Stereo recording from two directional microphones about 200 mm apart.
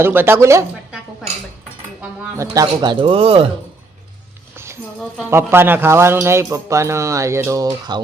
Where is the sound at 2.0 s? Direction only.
15° right (ahead or behind).